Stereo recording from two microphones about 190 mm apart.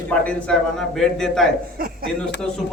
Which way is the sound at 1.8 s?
50° right (ahead or behind).